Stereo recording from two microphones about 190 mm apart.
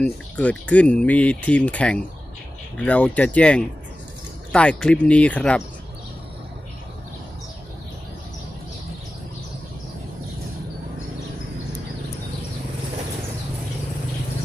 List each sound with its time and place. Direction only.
0.0 s speech: 5° left (ahead or behind)